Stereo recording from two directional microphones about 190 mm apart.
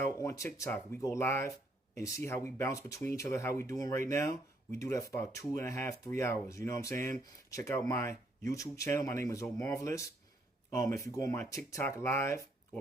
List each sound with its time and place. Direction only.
0.2 s speech: 15° left (ahead or behind)